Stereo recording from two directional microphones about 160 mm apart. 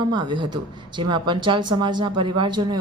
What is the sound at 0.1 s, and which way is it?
Speech, 25° right (ahead or behind).